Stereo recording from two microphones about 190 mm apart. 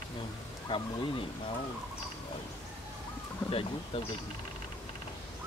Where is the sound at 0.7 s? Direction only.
25° left (ahead or behind).